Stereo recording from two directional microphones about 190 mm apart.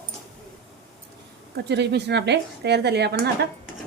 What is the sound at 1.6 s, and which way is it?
Speech, 60° right (ahead or behind).